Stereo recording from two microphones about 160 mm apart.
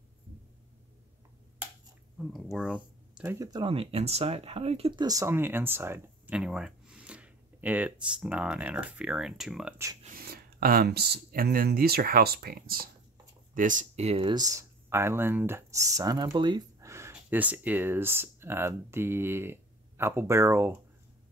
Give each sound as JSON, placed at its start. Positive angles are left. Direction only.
{"t": 2.5, "sound": "a sound", "side_deg": -5}
{"t": 3.3, "sound": "speech", "side_deg": -20}
{"t": 5.0, "sound": "speech", "side_deg": -20}
{"t": 10.0, "sound": "speech", "side_deg": -70}
{"t": 13.6, "sound": "speech", "side_deg": -55}
{"t": 14.3, "sound": "speech", "side_deg": -20}